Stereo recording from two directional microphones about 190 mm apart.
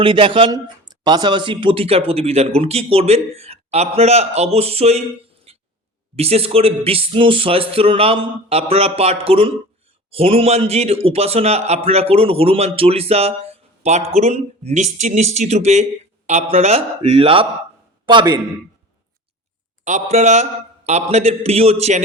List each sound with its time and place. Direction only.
0.0 s a man's voice: 25° right (ahead or behind)
5.5 s a sound: 30° right (ahead or behind)
6.1 s a man's voice: 30° right (ahead or behind)
19.8 s a man's voice: 35° right (ahead or behind)